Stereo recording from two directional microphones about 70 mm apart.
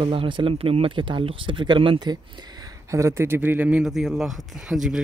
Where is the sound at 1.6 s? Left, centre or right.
Right.